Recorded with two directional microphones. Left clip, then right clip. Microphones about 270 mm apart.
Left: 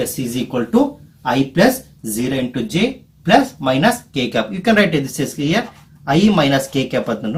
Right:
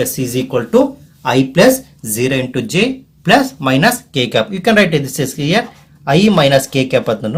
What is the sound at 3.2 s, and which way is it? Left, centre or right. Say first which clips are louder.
Speech: right 2 dB; right.